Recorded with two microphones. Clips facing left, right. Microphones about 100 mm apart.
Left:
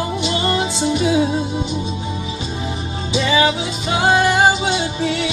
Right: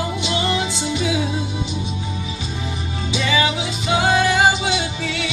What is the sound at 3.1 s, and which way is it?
Music, 30° left (ahead or behind).